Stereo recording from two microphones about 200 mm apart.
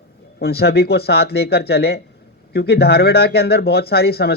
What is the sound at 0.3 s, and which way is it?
Speech, 55° left (ahead or behind).